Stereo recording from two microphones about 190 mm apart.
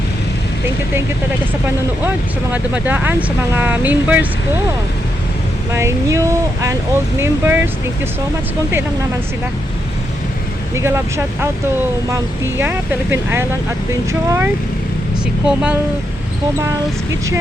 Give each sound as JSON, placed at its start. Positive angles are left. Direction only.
{"t": 2.0, "sound": "speech", "side_deg": -10}
{"t": 5.7, "sound": "speech", "side_deg": -15}
{"t": 10.8, "sound": "speech", "side_deg": -15}